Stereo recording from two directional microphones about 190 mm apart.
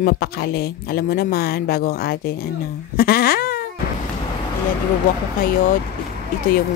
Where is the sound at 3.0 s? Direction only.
55° left (ahead or behind).